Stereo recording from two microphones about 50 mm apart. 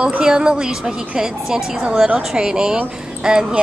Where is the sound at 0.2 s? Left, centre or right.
Centre.